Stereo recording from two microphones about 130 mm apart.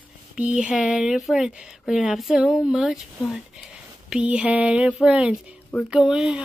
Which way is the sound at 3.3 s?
5° right (ahead or behind).